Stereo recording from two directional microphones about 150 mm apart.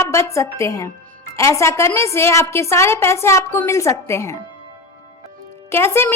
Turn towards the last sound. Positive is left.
turn(degrees=15)  # may be behind; listen again after turning